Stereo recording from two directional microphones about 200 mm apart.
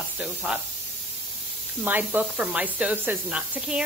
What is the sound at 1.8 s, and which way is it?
Speech, 10° right (ahead or behind).